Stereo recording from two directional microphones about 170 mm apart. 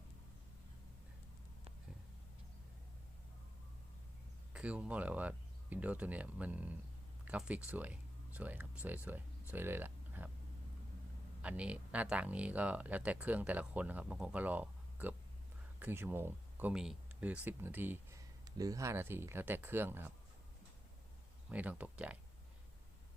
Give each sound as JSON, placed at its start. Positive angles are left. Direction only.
{"t": 4.5, "sound": "speech", "side_deg": -5}
{"t": 11.4, "sound": "speech", "side_deg": -5}
{"t": 21.5, "sound": "speech", "side_deg": -10}